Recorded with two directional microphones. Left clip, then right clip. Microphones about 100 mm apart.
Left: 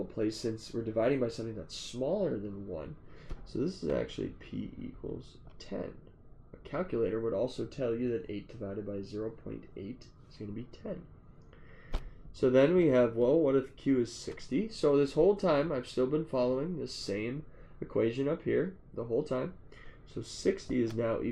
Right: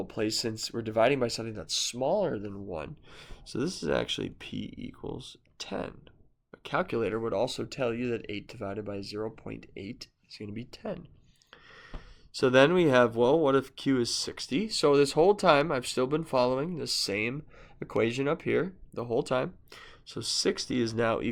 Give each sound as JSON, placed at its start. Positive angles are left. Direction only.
{"t": 0.2, "sound": "speech", "side_deg": -25}
{"t": 12.3, "sound": "speech", "side_deg": -40}